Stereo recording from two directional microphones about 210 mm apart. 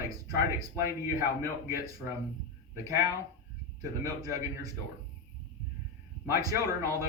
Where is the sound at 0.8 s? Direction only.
15° right (ahead or behind).